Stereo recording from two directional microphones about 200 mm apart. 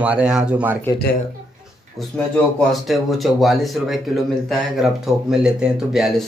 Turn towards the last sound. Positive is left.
turn(degrees=0)  # may be behind; listen again after turning